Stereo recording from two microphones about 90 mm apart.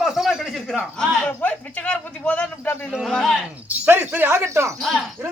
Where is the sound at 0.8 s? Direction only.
15° left (ahead or behind).